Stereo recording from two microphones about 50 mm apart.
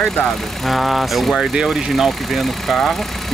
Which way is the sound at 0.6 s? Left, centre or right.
Centre.